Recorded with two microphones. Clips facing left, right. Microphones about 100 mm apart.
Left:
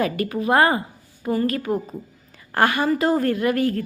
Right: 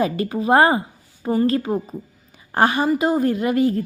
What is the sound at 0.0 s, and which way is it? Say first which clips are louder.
A woman's voice: right 1 dB; 25° right (ahead or behind).